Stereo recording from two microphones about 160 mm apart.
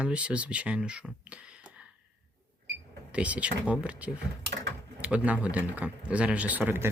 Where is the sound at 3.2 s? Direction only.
10° right (ahead or behind).